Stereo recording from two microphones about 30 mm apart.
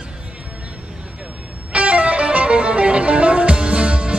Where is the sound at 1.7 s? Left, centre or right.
Right.